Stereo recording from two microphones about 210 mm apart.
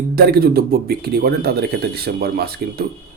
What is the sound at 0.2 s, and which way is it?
Speech, 50° right (ahead or behind).